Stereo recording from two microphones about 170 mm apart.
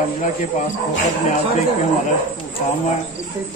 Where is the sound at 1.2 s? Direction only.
40° left (ahead or behind).